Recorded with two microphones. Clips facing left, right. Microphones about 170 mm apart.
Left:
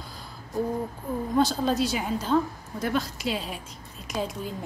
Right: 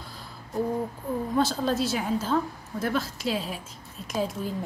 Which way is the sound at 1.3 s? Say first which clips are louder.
Left 2 dB; centre (ahead or behind).